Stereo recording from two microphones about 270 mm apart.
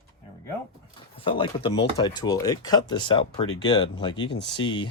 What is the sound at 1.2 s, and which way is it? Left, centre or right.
Speech, centre.